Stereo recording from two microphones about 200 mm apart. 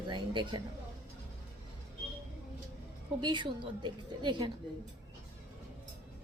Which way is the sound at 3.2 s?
25° right (ahead or behind).